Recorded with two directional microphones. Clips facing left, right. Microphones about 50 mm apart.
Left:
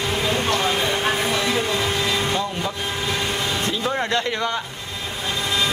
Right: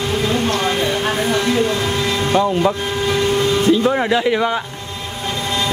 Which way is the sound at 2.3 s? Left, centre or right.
Right.